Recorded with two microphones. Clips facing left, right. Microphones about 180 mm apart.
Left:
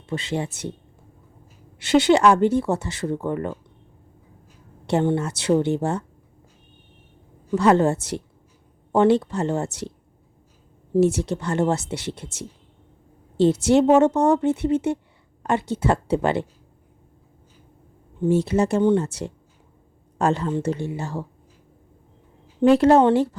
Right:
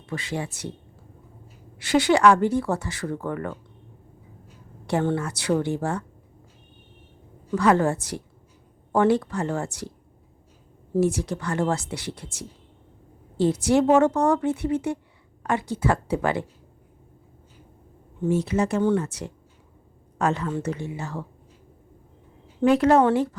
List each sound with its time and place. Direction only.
0.0 s speech: 25° left (ahead or behind)
1.8 s speech: 25° left (ahead or behind)
5.1 s speech: 25° left (ahead or behind)
7.5 s speech: 25° left (ahead or behind)
11.0 s speech: 25° left (ahead or behind)
18.3 s speech: 30° left (ahead or behind)
22.6 s speech: 30° left (ahead or behind)